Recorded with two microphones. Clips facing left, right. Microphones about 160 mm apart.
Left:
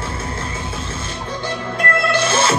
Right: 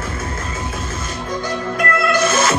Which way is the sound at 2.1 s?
30° left (ahead or behind).